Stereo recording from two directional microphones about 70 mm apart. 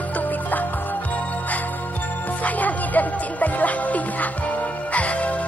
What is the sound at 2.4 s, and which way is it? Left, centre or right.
Music, left.